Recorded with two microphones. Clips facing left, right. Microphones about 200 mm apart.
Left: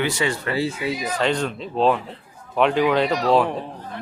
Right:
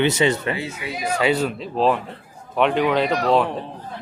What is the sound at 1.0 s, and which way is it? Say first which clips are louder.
Speech: right 4 dB; 5° right (ahead or behind).